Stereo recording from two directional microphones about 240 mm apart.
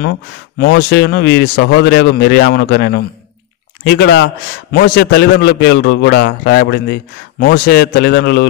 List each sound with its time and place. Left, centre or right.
0.6 s a man's voice: left